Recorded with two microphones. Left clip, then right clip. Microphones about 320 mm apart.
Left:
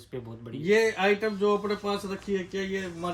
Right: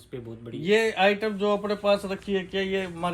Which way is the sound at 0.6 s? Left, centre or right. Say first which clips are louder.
Right 2 dB; centre.